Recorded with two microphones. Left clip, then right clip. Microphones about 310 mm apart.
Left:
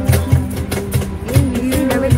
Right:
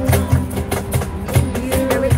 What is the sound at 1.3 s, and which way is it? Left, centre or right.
Music, right.